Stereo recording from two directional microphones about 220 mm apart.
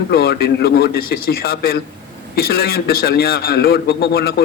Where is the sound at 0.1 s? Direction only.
45° left (ahead or behind).